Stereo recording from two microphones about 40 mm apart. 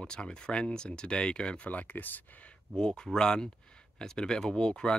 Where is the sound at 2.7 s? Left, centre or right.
Centre.